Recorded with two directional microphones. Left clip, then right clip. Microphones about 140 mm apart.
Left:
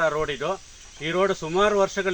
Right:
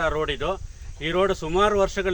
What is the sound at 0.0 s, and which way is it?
Speech, 35° right (ahead or behind).